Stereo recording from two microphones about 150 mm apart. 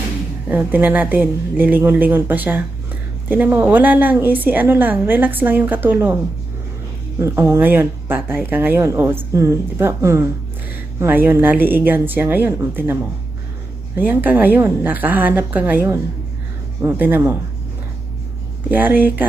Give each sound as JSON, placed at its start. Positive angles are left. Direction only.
{"t": 0.4, "sound": "a woman's voice", "side_deg": -10}
{"t": 7.2, "sound": "a woman's voice", "side_deg": -20}
{"t": 18.7, "sound": "a woman's voice", "side_deg": -10}